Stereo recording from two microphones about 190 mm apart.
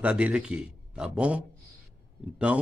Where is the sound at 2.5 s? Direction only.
5° right (ahead or behind).